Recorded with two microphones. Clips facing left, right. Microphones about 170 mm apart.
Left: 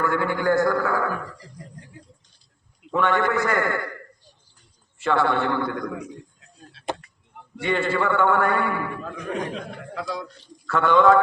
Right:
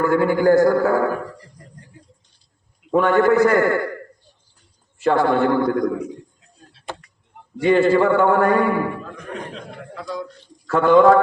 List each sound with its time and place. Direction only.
0.0 s a man's voice: 40° right (ahead or behind)
2.9 s a man's voice: 40° right (ahead or behind)
4.9 s a man's voice: 40° right (ahead or behind)
7.6 s a man's voice: 40° right (ahead or behind)
9.9 s a man's voice: 80° left
10.7 s a man's voice: 35° right (ahead or behind)